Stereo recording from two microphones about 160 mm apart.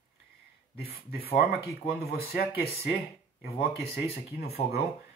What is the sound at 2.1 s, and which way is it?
Speech, 70° left (ahead or behind).